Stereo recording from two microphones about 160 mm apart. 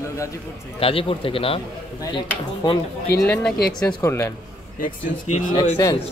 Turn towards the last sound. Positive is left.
turn(degrees=20)  # may be behind; listen again after turning